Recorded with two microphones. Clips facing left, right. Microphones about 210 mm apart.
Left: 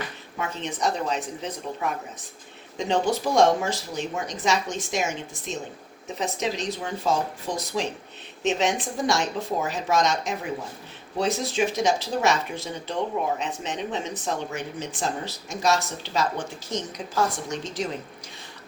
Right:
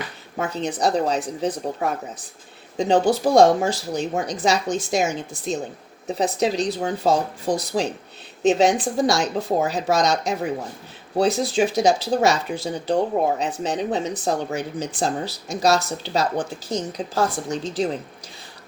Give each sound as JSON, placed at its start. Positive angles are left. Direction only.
{"t": 0.3, "sound": "speech", "side_deg": -35}